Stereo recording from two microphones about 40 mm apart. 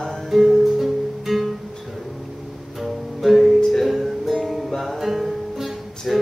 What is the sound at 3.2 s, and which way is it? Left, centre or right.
Music, centre.